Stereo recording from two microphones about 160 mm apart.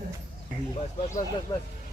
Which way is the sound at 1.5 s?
20° left (ahead or behind).